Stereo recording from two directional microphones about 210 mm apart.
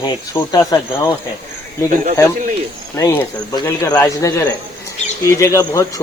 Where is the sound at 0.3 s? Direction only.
15° left (ahead or behind).